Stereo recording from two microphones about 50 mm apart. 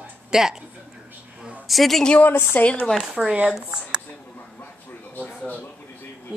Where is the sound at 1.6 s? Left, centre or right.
Centre.